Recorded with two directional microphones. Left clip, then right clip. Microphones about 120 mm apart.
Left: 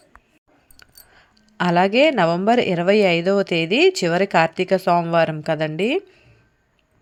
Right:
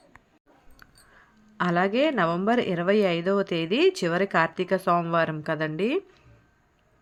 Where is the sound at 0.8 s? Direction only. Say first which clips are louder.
Left 5 dB; 30° left (ahead or behind).